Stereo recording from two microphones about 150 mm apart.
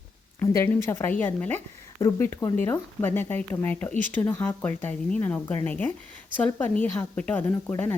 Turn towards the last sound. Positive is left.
turn(degrees=10)  # may be behind; listen again after turning